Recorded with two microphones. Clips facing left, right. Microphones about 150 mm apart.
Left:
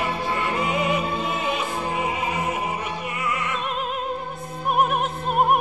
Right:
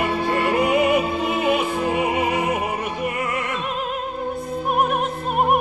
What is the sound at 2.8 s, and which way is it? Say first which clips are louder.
Opera: right 4 dB; 50° right (ahead or behind).